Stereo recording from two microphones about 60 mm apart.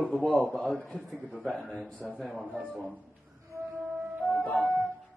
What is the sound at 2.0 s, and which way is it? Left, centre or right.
Speech, centre.